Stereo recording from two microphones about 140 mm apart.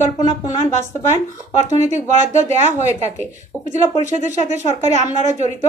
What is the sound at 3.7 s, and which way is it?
A woman's voice, 55° right (ahead or behind).